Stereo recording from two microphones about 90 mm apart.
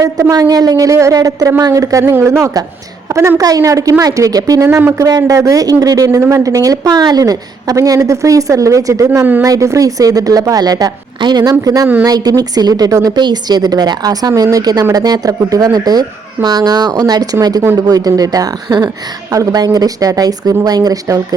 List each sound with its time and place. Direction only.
0.0 s a woman's voice: 40° right (ahead or behind)
2.1 s a woman's voice: 30° right (ahead or behind); by 11.5 s 50° right (ahead or behind)
11.6 s a woman's voice: 40° right (ahead or behind)